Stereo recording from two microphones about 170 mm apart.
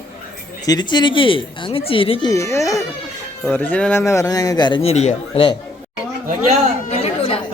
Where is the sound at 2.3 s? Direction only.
15° left (ahead or behind).